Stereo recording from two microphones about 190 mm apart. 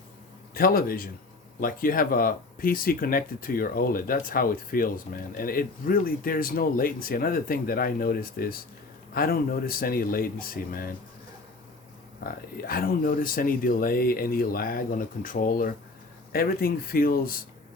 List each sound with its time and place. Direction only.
0.5 s speech: 50° left (ahead or behind)
12.2 s speech: 50° left (ahead or behind)